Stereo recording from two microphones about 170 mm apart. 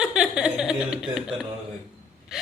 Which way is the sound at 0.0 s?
5° right (ahead or behind).